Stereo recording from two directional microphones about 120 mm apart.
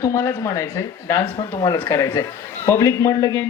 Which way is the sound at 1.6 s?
30° left (ahead or behind).